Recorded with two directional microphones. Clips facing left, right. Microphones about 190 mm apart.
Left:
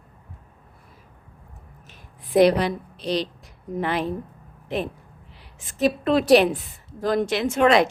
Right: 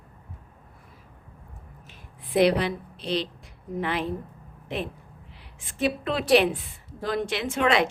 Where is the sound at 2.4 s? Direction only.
40° left (ahead or behind).